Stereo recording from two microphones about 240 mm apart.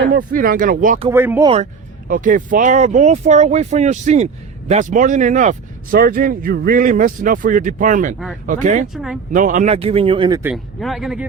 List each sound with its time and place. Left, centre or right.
0.1 s speech: right
1.1 s speech: centre
2.0 s speech: right
8.9 s speech: centre
9.3 s speech: right; by 10.5 s centre
10.5 s speech: centre